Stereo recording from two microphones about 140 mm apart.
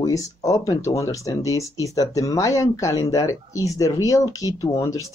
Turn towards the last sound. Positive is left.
turn(degrees=25)  # may be behind; listen again after turning